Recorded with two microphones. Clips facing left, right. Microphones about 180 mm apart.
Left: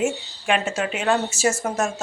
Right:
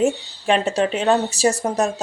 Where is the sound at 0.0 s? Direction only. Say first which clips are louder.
Right 4 dB; 35° right (ahead or behind).